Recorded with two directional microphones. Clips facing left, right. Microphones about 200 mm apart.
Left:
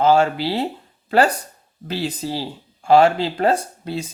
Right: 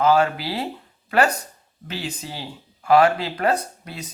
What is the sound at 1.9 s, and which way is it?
Speech, 35° left (ahead or behind).